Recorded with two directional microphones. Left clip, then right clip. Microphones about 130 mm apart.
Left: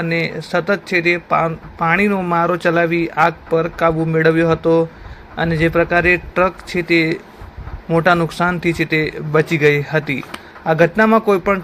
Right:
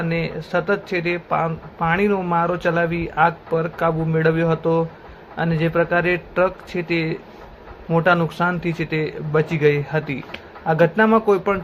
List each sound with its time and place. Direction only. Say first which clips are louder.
0.0 s speech: left 5 dB; 25° left (ahead or behind)